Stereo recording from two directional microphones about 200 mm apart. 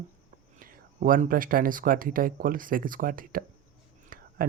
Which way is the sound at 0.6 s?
45° right (ahead or behind).